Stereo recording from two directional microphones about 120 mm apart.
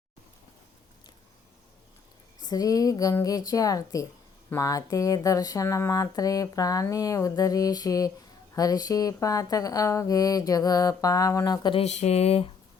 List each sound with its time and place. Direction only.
2.4 s speech: 30° left (ahead or behind)
11.8 s speech: 70° left (ahead or behind)